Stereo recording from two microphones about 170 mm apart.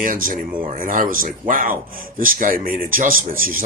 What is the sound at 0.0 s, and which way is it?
Speech, 50° right (ahead or behind).